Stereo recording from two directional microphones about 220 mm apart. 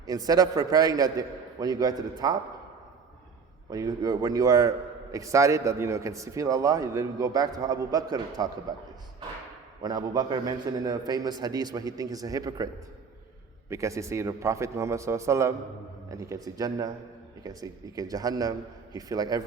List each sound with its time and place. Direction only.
0.1 s a man's voice: 15° right (ahead or behind)
3.7 s a man's voice: 15° right (ahead or behind)
9.8 s a man's voice: 20° right (ahead or behind)
13.7 s a man's voice: 15° right (ahead or behind)